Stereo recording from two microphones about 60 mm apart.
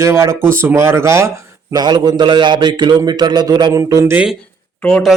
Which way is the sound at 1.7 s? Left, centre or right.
Right.